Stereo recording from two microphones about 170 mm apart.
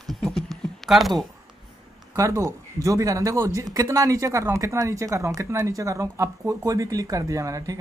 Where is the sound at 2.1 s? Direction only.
20° right (ahead or behind).